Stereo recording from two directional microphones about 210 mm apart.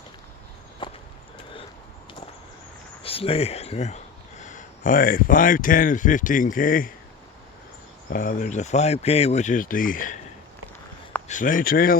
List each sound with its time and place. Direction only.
0.8 s walk: 25° left (ahead or behind)
3.0 s speech: 25° left (ahead or behind)
8.1 s speech: 40° left (ahead or behind)
11.3 s speech: 40° left (ahead or behind)